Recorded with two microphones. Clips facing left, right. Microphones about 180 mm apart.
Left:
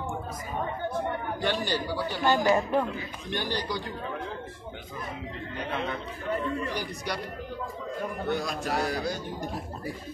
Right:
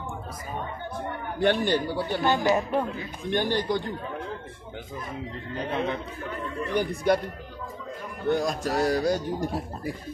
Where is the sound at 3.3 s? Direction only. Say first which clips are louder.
Right 6 dB; 50° right (ahead or behind).